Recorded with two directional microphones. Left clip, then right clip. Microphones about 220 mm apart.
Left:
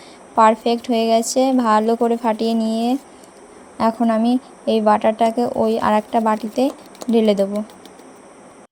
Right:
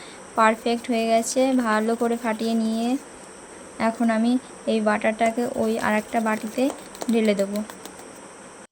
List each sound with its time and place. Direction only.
0.3 s speech: 15° left (ahead or behind)